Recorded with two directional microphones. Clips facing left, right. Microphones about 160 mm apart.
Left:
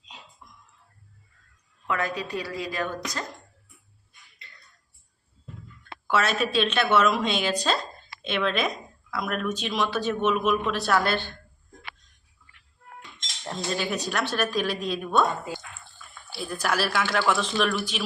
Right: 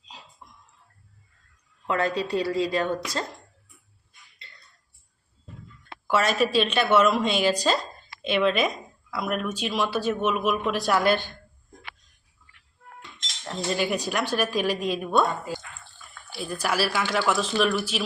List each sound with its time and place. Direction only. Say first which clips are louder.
1.9 s a woman's voice: right 4 dB; 30° right (ahead or behind)
4.4 s a sound: right 1 dB; 30° right (ahead or behind)
6.1 s speech: right 2 dB; 5° right (ahead or behind)
13.6 s speech: right 3 dB; 10° right (ahead or behind)
16.4 s speech: right 1 dB; 5° right (ahead or behind)